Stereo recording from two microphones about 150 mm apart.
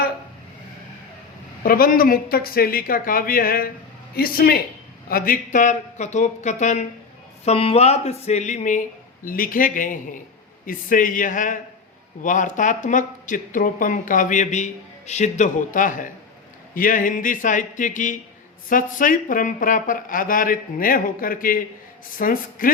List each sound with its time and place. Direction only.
1.6 s speech: 70° left (ahead or behind)
4.1 s a woman's voice: 90° left
5.0 s speech: 75° left (ahead or behind); by 6.8 s 50° left (ahead or behind)
7.4 s speech: 40° left (ahead or behind); by 22.7 s 65° left (ahead or behind)